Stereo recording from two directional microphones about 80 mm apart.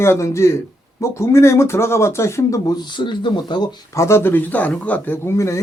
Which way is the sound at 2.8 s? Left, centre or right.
Left.